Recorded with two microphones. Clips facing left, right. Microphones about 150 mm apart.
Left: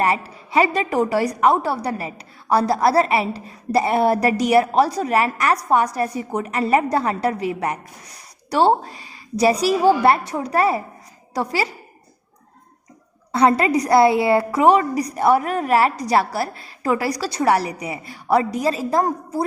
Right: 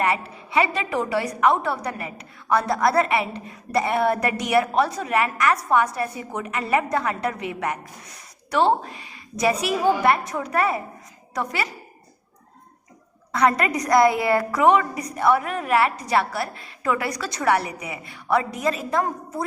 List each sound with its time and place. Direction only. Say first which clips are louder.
0.0 s a woman's voice: left 3 dB; 35° left (ahead or behind)
13.3 s a woman's voice: left 4 dB; 30° left (ahead or behind)